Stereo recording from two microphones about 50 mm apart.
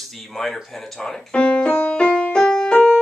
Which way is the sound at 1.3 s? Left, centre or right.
Left.